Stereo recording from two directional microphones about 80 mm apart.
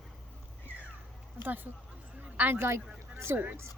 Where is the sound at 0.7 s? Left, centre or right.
Right.